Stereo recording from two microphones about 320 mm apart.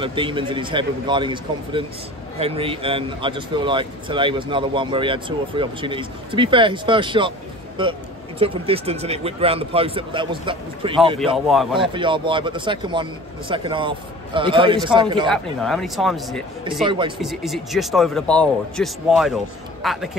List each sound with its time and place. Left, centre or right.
0.0 s speech: centre
11.3 s speech: centre
11.8 s speech: centre
15.3 s speech: centre
16.8 s speech: centre
17.2 s speech: centre